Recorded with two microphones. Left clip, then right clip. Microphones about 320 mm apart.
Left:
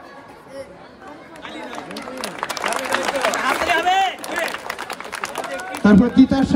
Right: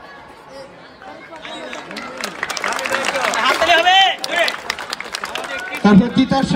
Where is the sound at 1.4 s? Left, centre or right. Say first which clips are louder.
Right 1 dB; left.